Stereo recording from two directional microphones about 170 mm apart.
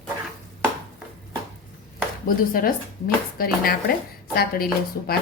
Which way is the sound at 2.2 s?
55° left (ahead or behind).